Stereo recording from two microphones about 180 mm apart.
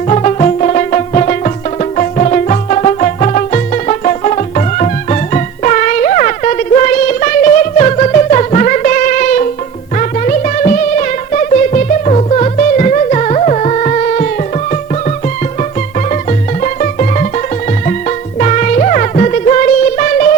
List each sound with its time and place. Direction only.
0.1 s music: 35° left (ahead or behind)
16.6 s music: 45° left (ahead or behind)
18.3 s music: 45° left (ahead or behind)